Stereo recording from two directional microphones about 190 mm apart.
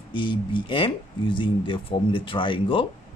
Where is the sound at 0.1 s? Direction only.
25° left (ahead or behind).